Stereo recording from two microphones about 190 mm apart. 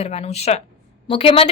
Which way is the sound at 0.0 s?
35° left (ahead or behind).